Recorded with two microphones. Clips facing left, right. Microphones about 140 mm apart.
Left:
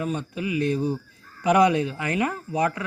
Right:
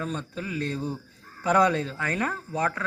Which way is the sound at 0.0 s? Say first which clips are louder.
Left 4 dB; 15° left (ahead or behind).